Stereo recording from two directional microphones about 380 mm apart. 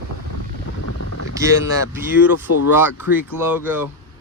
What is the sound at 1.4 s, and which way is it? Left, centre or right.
A man's voice, centre.